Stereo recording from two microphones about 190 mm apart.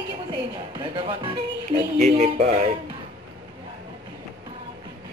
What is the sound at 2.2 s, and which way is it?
Speech, 35° right (ahead or behind).